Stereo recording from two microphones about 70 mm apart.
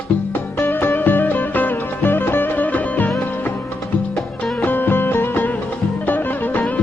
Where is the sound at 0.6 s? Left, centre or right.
Left.